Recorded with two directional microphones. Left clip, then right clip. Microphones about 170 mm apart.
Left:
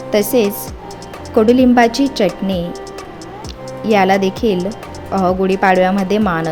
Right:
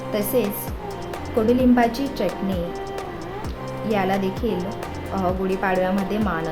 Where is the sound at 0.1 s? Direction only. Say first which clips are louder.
Left 9 dB; 40° left (ahead or behind).